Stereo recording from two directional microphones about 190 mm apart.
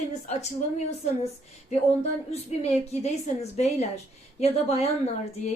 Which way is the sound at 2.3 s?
35° left (ahead or behind).